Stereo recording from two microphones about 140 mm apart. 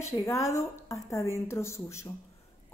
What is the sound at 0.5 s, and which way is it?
A woman's voice, 20° left (ahead or behind).